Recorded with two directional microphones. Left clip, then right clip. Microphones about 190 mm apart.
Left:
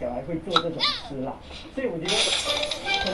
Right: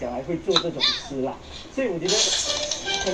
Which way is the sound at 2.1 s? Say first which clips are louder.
Even; 30° left (ahead or behind).